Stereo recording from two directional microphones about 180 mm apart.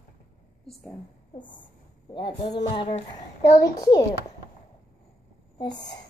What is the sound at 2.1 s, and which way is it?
Speech, 25° left (ahead or behind).